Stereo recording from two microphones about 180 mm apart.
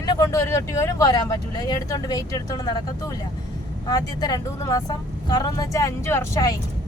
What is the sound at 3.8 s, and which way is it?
Speech, 20° left (ahead or behind).